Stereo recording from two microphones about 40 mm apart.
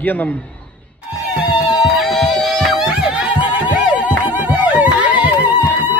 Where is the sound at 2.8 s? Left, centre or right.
Right.